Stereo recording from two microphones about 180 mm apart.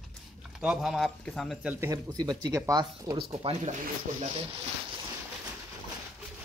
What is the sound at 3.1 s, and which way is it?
Speech, 30° right (ahead or behind).